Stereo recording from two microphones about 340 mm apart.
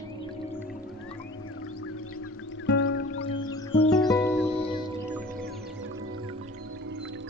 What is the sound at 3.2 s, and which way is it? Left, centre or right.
Music, centre.